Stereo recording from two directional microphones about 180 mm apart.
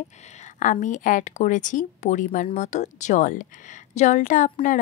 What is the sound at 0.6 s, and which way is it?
Speech, 45° left (ahead or behind).